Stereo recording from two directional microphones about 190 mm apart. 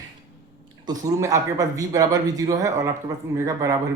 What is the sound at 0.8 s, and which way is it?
Speech, 20° right (ahead or behind).